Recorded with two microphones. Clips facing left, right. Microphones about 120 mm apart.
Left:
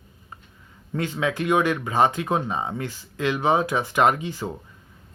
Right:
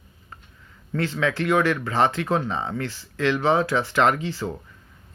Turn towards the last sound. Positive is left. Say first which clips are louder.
# even
turn(degrees=20)  # may be behind; listen again after turning